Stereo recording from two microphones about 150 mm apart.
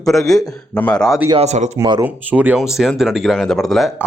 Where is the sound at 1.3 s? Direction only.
45° right (ahead or behind).